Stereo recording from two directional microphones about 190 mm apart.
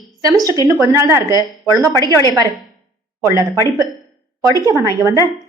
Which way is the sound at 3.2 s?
15° right (ahead or behind).